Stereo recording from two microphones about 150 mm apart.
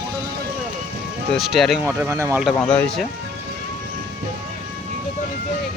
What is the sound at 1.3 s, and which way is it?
Speech, centre (ahead or behind).